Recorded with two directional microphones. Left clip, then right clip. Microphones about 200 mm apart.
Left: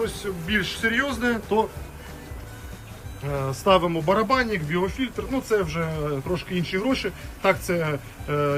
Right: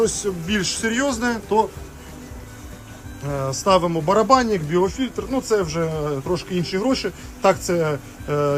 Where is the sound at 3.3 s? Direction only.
Centre (ahead or behind).